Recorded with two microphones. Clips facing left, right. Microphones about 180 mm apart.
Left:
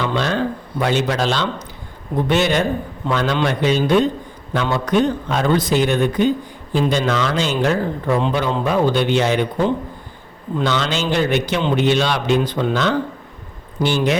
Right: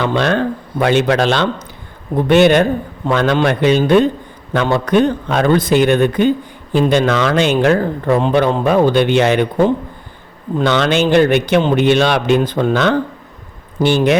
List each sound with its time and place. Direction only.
0.0 s speech: 60° right (ahead or behind)